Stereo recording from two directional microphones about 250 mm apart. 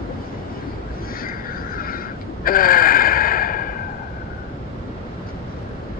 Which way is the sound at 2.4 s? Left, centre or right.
Left.